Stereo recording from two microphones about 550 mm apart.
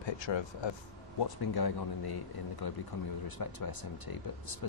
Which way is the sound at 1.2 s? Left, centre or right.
Left.